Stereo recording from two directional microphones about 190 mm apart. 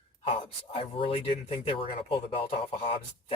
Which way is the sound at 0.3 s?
30° left (ahead or behind).